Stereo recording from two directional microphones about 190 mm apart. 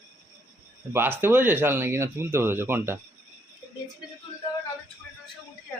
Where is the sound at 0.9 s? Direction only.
10° right (ahead or behind).